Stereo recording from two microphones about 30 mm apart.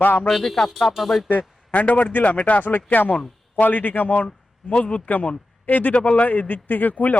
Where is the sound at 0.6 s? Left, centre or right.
Centre.